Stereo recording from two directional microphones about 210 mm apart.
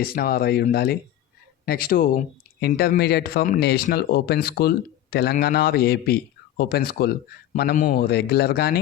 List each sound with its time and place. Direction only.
0.0 s speech: 45° left (ahead or behind)